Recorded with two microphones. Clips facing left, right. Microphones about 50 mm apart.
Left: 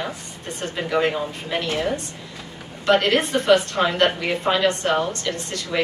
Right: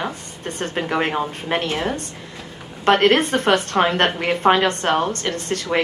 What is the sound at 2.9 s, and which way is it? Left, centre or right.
A woman's voice, right.